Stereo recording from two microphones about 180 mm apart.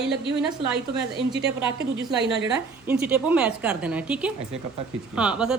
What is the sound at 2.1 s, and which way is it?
Speech, 70° right (ahead or behind).